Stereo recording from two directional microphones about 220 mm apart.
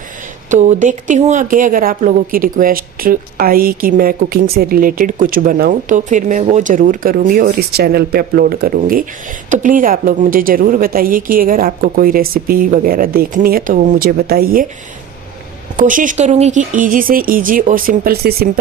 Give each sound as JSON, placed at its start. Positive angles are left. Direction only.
{"t": 0.5, "sound": "speech", "side_deg": -30}
{"t": 15.8, "sound": "speech", "side_deg": -35}